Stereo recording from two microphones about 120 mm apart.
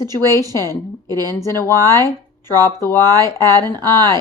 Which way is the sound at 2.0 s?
20° left (ahead or behind).